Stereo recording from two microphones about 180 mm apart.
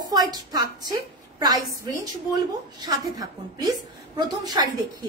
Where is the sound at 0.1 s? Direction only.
20° right (ahead or behind).